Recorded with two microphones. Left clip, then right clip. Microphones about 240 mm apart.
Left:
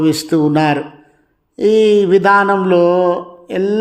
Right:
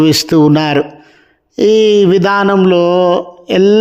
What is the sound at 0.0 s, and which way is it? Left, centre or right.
Mantra, right.